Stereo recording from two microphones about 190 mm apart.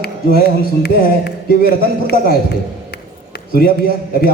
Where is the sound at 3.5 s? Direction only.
50° left (ahead or behind).